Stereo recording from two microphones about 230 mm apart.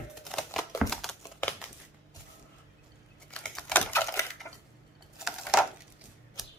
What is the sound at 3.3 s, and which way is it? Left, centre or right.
Typewriter, centre.